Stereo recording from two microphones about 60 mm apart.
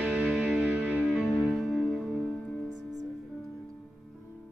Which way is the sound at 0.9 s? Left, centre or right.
Right.